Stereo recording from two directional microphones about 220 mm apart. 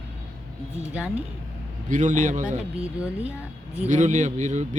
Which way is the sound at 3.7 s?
30° right (ahead or behind).